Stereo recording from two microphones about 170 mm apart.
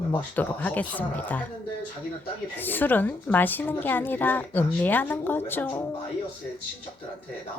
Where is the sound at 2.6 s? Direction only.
10° left (ahead or behind).